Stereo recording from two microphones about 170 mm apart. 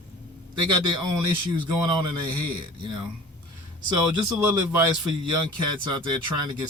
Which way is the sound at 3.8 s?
25° right (ahead or behind).